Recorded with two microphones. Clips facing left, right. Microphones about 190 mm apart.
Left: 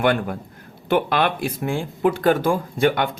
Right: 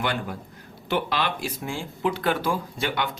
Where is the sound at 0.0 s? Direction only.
55° left (ahead or behind).